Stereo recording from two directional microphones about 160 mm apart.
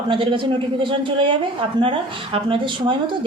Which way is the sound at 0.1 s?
30° right (ahead or behind).